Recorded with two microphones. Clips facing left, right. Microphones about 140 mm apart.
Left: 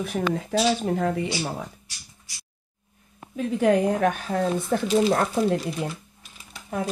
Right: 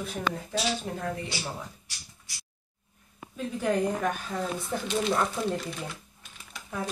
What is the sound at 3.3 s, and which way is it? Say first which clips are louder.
Speech: left 7 dB; 70° left (ahead or behind).